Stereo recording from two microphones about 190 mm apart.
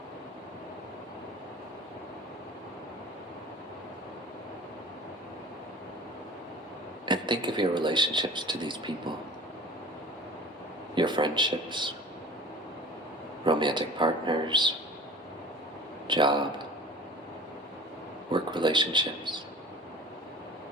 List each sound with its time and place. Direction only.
7.0 s speech: 25° right (ahead or behind)
10.9 s speech: 25° right (ahead or behind)
13.4 s speech: 25° right (ahead or behind)
16.0 s speech: 25° right (ahead or behind)
18.3 s speech: 25° right (ahead or behind)